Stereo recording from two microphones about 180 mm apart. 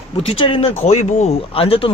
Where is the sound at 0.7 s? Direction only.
40° left (ahead or behind).